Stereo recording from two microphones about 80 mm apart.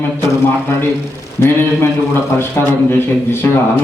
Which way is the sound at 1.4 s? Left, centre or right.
Left.